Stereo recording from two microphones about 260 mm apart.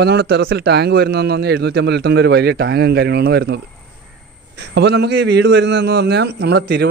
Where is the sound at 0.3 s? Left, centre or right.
Right.